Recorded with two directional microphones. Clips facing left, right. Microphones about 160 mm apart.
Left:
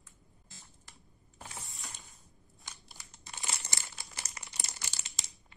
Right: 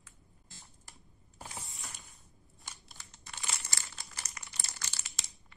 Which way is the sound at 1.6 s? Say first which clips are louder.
Even; centre (ahead or behind).